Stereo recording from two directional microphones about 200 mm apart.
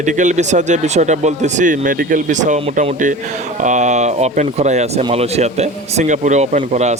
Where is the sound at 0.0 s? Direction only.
40° right (ahead or behind).